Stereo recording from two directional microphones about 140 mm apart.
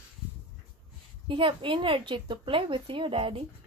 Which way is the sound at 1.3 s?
40° right (ahead or behind).